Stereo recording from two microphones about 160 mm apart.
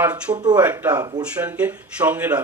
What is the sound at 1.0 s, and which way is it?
Speech, 25° right (ahead or behind).